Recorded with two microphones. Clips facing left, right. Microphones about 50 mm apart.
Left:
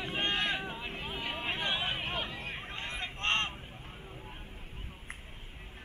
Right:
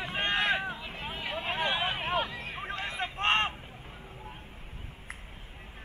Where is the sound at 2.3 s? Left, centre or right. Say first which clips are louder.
Right 2 dB; centre.